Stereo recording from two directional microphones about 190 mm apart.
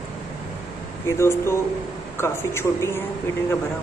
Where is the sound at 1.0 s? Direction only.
15° left (ahead or behind).